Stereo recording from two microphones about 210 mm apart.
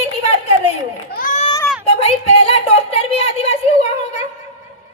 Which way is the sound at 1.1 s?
40° left (ahead or behind).